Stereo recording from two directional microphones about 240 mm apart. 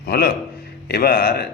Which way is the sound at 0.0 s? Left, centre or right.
Left.